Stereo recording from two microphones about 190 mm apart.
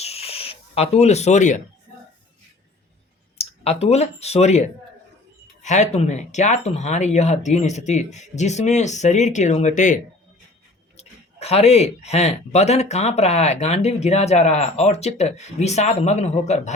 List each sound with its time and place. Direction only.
0.0 s a sound: 30° left (ahead or behind)
3.3 s speech: 30° left (ahead or behind)
5.6 s speech: 40° left (ahead or behind)